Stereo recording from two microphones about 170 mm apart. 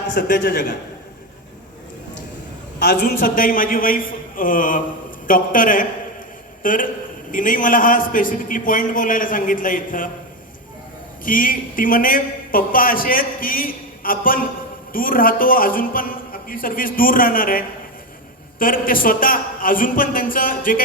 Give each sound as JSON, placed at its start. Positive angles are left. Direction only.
{"t": 0.1, "sound": "a man's voice", "side_deg": 55}
{"t": 2.7, "sound": "a man's voice", "side_deg": 70}
{"t": 11.2, "sound": "a man's voice", "side_deg": 55}
{"t": 18.6, "sound": "a man's voice", "side_deg": 55}